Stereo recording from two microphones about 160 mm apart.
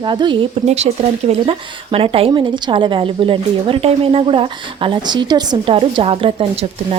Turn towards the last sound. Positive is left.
turn(degrees=-35)  # may be behind; listen again after turning